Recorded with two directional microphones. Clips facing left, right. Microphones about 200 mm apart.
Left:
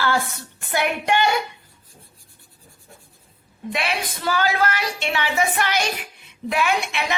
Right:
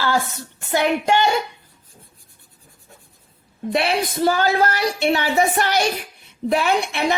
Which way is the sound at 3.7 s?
40° right (ahead or behind).